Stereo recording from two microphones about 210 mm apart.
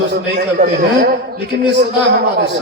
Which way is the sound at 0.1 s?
50° right (ahead or behind).